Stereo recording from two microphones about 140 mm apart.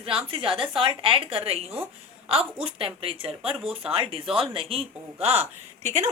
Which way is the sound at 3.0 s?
40° right (ahead or behind).